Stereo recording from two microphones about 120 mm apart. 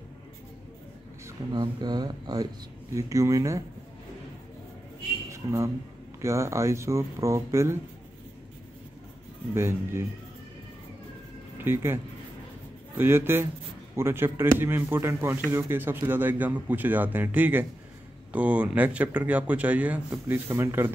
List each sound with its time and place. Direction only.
1.5 s speech: 35° right (ahead or behind)
5.3 s a man's voice: 25° right (ahead or behind)
9.5 s speech: 20° right (ahead or behind)
11.5 s speech: 20° right (ahead or behind)
20.4 s speech: 20° right (ahead or behind)